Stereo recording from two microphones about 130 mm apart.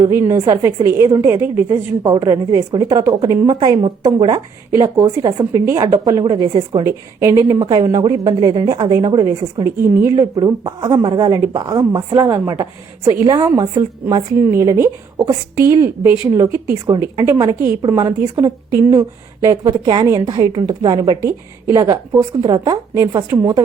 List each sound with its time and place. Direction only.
0.0 s a woman's voice: 20° right (ahead or behind)